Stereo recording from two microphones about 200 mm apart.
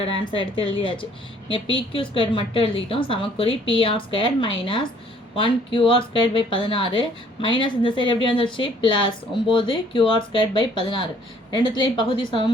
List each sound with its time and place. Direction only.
0.0 s a woman's voice: 25° left (ahead or behind)